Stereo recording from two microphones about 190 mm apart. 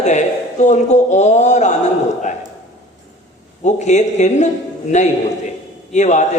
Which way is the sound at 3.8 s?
40° left (ahead or behind).